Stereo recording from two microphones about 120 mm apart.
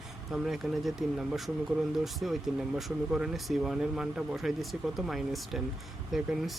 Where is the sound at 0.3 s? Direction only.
Centre (ahead or behind).